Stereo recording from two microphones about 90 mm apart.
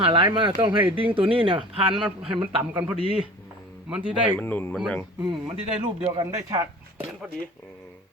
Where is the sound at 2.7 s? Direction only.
15° right (ahead or behind).